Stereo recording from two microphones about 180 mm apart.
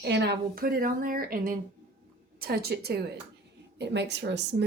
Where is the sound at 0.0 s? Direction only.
70° right (ahead or behind).